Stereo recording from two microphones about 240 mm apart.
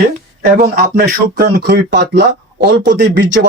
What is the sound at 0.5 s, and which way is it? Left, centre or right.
Speech, right.